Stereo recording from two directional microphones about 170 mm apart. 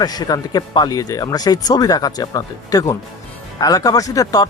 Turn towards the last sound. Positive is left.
turn(degrees=20)  # may be behind; listen again after turning